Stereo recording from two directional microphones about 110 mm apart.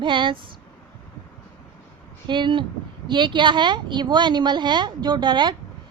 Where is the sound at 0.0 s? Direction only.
45° right (ahead or behind).